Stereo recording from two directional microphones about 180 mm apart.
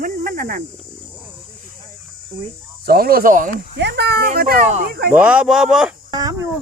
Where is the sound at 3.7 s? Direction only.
65° right (ahead or behind).